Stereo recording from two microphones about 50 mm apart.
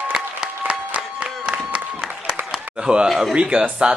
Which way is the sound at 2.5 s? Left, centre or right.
Centre.